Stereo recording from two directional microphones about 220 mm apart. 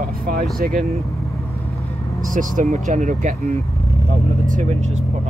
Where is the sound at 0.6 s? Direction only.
40° right (ahead or behind).